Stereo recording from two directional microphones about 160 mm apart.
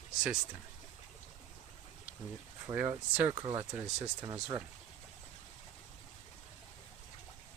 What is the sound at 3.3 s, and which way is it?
Speech, 25° right (ahead or behind).